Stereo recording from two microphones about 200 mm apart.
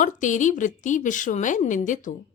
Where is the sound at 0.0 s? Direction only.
40° left (ahead or behind).